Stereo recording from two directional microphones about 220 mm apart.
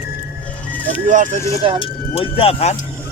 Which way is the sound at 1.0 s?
35° right (ahead or behind).